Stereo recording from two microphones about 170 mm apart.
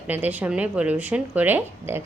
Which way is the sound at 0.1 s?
10° right (ahead or behind).